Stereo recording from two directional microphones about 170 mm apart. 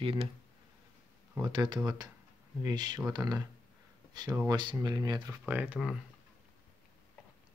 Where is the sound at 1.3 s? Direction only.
25° right (ahead or behind).